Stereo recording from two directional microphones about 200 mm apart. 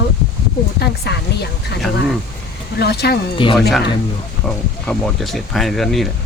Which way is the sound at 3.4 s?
25° left (ahead or behind).